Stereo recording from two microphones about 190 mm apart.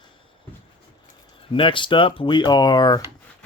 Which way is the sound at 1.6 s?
25° left (ahead or behind).